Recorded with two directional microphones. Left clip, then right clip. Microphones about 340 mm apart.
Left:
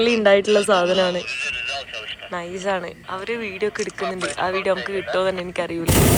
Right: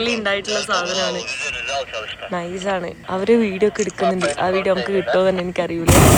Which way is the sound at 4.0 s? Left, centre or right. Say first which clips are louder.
Right 7 dB; right.